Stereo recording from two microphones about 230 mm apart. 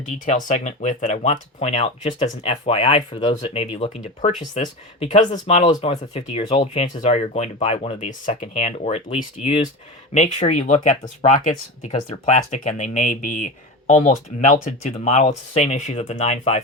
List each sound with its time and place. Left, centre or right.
0.0 s speech: left